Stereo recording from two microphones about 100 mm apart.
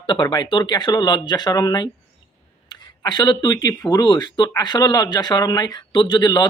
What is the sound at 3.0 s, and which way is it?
Speech, 45° left (ahead or behind).